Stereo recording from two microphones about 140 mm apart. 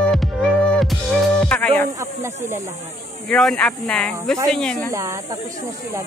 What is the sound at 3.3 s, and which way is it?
Speech, 5° left (ahead or behind).